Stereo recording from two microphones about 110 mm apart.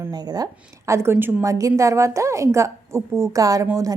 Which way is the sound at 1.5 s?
30° right (ahead or behind).